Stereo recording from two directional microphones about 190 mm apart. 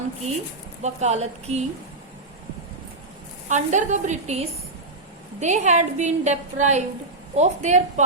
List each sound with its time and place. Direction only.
0.8 s a woman's voice: 35° right (ahead or behind)
3.5 s a woman's voice: 40° right (ahead or behind)